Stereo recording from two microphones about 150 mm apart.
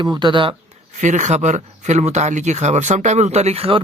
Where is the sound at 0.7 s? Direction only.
55° right (ahead or behind).